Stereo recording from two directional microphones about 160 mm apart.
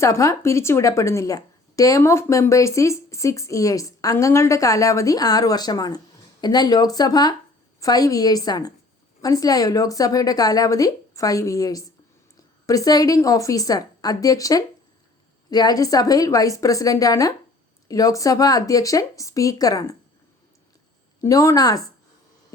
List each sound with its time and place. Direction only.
0.0 s a woman's voice: 20° left (ahead or behind)
21.2 s a woman's voice: 20° left (ahead or behind)